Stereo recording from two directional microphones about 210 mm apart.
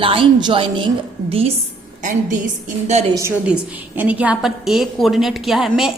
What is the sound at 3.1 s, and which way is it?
A woman's voice, 15° right (ahead or behind).